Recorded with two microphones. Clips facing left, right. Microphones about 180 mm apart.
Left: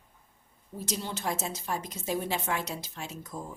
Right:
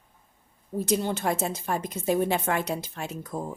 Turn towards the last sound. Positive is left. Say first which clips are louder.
# right 6 dB
turn(degrees=-55)  # may be behind; listen again after turning